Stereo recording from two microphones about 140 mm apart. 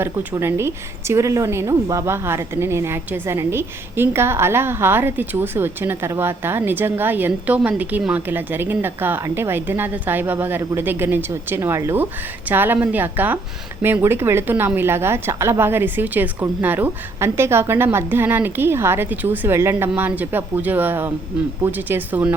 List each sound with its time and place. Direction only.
0.0 s a woman's voice: 15° right (ahead or behind)